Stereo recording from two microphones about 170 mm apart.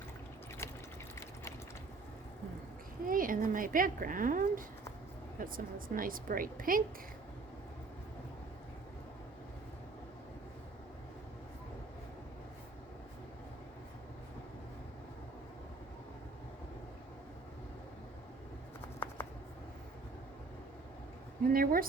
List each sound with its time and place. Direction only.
3.1 s a child's voice: 55° right (ahead or behind)
18.9 s shuffling cards: 15° left (ahead or behind)
21.5 s a sound: 55° right (ahead or behind)